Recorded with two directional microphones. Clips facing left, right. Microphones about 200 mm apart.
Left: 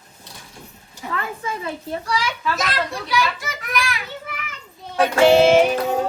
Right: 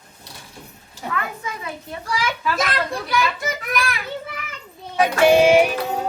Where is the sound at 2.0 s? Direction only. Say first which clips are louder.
Right 2 dB; 55° right (ahead or behind).